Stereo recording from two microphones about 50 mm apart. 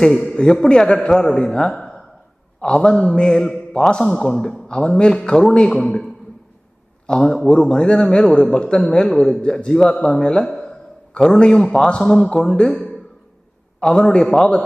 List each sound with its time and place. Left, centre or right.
0.3 s a man's voice: centre
7.2 s a man's voice: centre
13.7 s a man's voice: centre